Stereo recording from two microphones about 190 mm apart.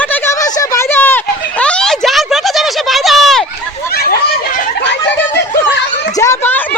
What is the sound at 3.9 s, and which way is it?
Snicker, 55° left (ahead or behind).